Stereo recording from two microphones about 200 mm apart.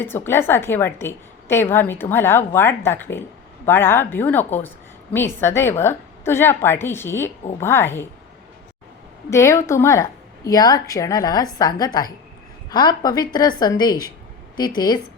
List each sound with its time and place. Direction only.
0.0 s a woman's voice: 10° left (ahead or behind)
9.3 s a woman's voice: 15° left (ahead or behind)